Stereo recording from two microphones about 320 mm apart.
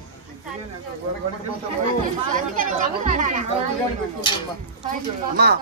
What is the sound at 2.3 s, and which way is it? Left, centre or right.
A man's voice, right.